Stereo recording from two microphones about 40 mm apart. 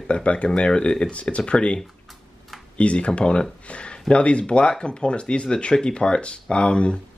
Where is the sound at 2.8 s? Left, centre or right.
Left.